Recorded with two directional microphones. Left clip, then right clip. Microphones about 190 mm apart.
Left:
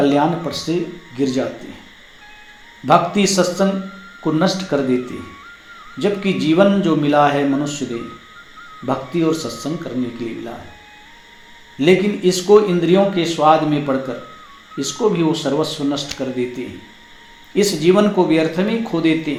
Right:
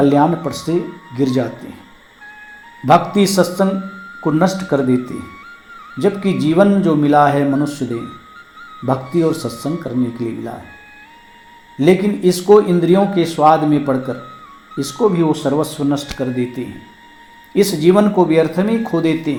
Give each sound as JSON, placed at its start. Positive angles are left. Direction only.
{"t": 0.0, "sound": "speech", "side_deg": -35}
{"t": 2.8, "sound": "speech", "side_deg": -40}
{"t": 8.9, "sound": "speech", "side_deg": -35}
{"t": 11.8, "sound": "speech", "side_deg": -40}